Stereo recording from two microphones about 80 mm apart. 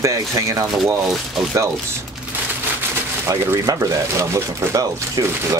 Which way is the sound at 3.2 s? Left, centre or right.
Right.